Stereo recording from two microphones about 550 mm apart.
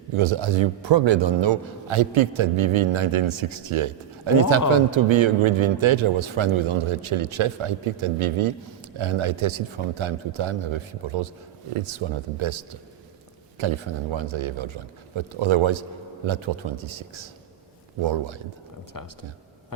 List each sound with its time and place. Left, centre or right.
0.2 s a man's voice: right
13.6 s a man's voice: right
18.9 s speech: left